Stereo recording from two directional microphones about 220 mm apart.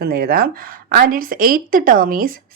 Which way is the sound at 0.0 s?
45° right (ahead or behind).